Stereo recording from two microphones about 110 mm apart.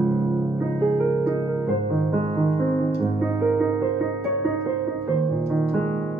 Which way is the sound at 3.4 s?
15° right (ahead or behind).